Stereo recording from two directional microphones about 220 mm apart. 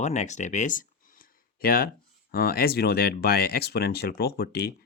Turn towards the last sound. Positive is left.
turn(degrees=45)  # may be behind; listen again after turning